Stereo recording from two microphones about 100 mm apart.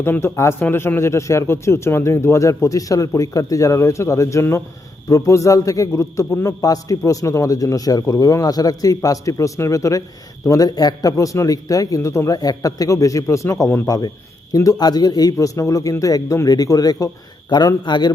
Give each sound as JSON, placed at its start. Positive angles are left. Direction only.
{"t": 0.0, "sound": "a man's voice", "side_deg": 20}
{"t": 13.8, "sound": "a man's voice", "side_deg": 40}